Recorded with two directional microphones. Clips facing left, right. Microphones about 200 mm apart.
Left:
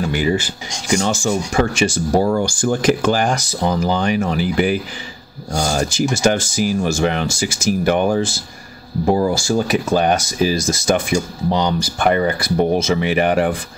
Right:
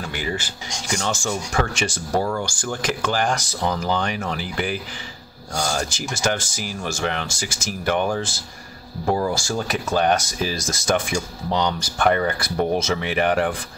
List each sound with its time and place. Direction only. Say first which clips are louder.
0.0 s speech: left 9 dB; 15° left (ahead or behind)
2.2 s speech: left 8 dB; 20° left (ahead or behind)
9.3 s speech: left 7 dB; 5° left (ahead or behind)